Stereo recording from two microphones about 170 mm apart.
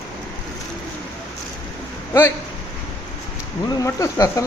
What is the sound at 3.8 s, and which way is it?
Speech, 20° left (ahead or behind).